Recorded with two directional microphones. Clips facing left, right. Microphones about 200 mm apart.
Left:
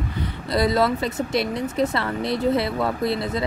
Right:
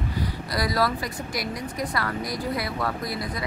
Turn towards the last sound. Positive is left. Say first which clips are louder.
# left 7 dB
turn(degrees=25)  # may be behind; listen again after turning